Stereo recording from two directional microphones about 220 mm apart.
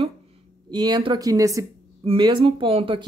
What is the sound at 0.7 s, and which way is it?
A woman's voice, 20° right (ahead or behind).